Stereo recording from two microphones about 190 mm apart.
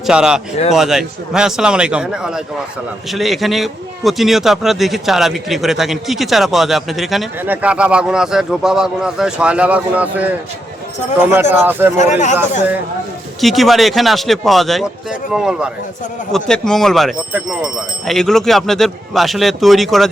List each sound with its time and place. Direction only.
0.0 s a man's voice: 5° right (ahead or behind)
13.4 s a man's voice: centre (ahead or behind)